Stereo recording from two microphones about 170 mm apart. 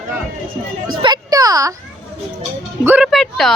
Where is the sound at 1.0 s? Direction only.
25° right (ahead or behind).